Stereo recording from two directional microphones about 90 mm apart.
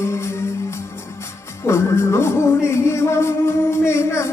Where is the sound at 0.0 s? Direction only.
30° left (ahead or behind).